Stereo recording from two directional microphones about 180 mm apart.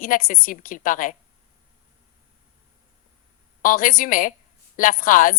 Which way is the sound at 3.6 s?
50° left (ahead or behind).